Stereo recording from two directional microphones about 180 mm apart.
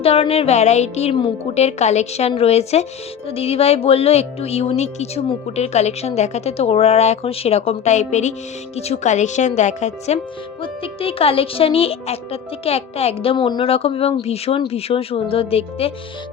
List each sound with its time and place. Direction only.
0.0 s speech: 35° left (ahead or behind)